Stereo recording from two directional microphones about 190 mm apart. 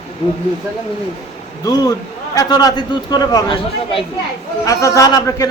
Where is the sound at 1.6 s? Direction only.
20° left (ahead or behind).